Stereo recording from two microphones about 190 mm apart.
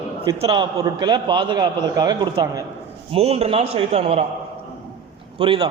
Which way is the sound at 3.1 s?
30° right (ahead or behind).